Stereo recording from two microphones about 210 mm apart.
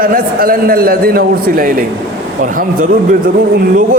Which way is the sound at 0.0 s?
45° right (ahead or behind).